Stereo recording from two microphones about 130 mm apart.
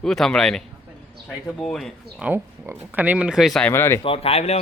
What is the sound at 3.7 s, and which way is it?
Speech, 20° left (ahead or behind).